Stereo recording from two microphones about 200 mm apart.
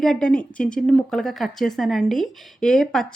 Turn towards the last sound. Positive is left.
turn(degrees=0)  # may be behind; listen again after turning